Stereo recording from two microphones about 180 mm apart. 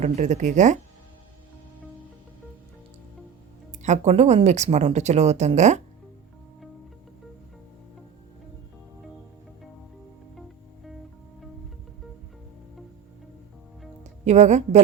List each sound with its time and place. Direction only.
0.0 s speech: 40° right (ahead or behind)
3.7 s speech: 40° right (ahead or behind)
14.3 s speech: 40° right (ahead or behind)